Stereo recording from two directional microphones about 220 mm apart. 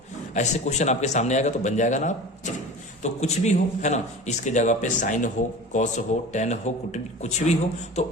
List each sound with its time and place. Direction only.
0.3 s speech: 30° left (ahead or behind)